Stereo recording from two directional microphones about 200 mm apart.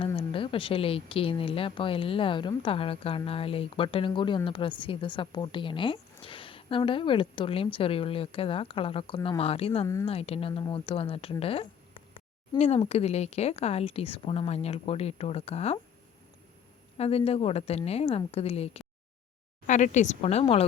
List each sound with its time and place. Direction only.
0.0 s speech: 25° left (ahead or behind)
9.8 s speech: 15° left (ahead or behind)
10.1 s speech: 30° left (ahead or behind)
17.0 s a woman's voice: 30° left (ahead or behind)